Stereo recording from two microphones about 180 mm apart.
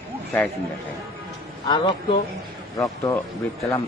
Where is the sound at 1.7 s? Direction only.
25° left (ahead or behind).